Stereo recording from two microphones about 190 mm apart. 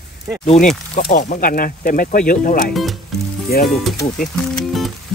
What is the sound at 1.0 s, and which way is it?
Speech, 45° left (ahead or behind).